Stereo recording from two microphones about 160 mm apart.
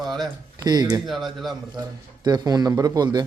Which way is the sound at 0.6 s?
25° right (ahead or behind).